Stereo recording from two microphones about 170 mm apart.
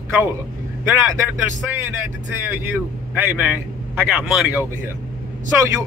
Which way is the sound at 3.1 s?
10° right (ahead or behind).